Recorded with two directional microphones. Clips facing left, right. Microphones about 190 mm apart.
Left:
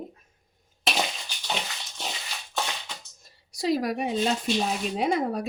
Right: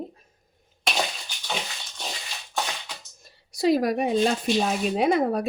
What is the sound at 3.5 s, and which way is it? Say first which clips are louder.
Speech: right 4 dB; 60° right (ahead or behind).